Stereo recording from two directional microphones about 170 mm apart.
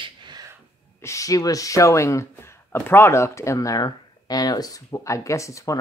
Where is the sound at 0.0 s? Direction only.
25° right (ahead or behind).